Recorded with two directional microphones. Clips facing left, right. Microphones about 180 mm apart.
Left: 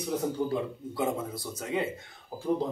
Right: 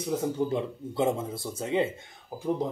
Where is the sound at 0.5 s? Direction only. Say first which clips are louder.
Right 2 dB; 25° right (ahead or behind).